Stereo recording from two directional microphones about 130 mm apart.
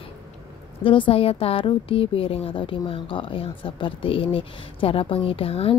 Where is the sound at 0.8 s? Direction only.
45° left (ahead or behind).